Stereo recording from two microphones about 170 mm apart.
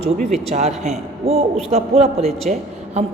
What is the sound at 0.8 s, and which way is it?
A woman's voice, 40° right (ahead or behind).